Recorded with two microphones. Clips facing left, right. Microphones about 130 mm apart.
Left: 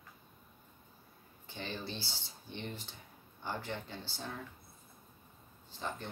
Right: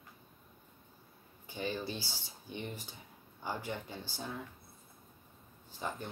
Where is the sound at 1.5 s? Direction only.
10° right (ahead or behind).